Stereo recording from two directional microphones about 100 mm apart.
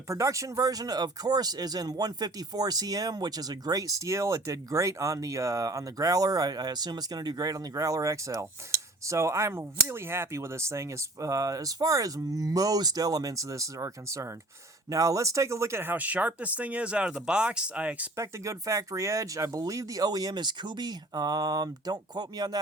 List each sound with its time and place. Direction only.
0.1 s speech: 30° right (ahead or behind); by 18.1 s 10° right (ahead or behind)
18.2 s speech: 30° right (ahead or behind)